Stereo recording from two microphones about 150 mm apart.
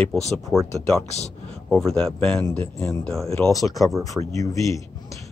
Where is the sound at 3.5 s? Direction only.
20° left (ahead or behind).